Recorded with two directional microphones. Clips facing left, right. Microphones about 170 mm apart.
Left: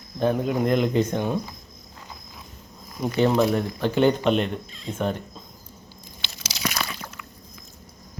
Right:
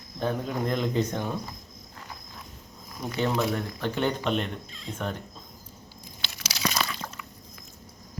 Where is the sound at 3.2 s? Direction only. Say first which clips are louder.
Left 6 dB; 30° left (ahead or behind).